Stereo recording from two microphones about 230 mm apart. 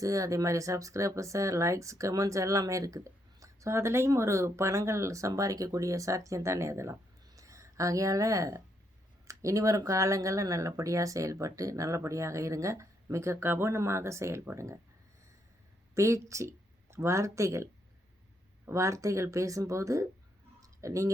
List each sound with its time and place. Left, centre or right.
0.0 s speech: centre
16.0 s speech: centre
20.6 s clicking: centre